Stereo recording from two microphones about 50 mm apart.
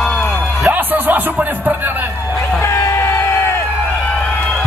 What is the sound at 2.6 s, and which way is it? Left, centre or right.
Music, left.